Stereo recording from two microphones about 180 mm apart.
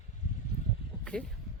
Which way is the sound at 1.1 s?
5° left (ahead or behind).